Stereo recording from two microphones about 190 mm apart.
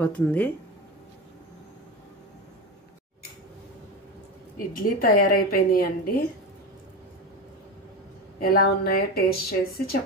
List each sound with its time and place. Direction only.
0.0 s speech: 10° left (ahead or behind)
4.8 s a woman's voice: 45° left (ahead or behind)
8.4 s speech: 55° left (ahead or behind)